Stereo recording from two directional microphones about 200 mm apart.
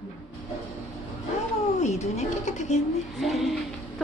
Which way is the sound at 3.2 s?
Centre (ahead or behind).